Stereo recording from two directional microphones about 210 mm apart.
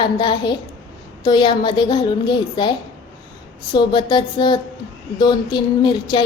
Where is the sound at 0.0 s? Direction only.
20° left (ahead or behind).